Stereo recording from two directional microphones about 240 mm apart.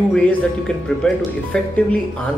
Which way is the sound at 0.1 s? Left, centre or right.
Centre.